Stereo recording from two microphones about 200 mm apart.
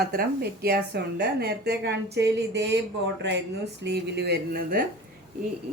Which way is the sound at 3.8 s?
55° right (ahead or behind).